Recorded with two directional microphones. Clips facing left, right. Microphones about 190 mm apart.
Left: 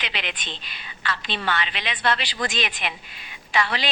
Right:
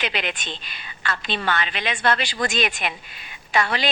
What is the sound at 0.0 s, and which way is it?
A woman's voice, 50° right (ahead or behind).